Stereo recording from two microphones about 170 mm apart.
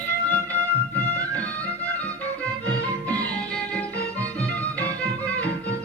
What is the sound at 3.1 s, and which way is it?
Music, 10° left (ahead or behind).